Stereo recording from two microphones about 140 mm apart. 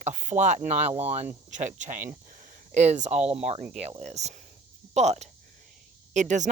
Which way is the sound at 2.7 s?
55° right (ahead or behind).